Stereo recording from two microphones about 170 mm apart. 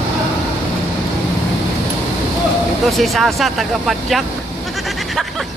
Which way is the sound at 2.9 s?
Centre (ahead or behind).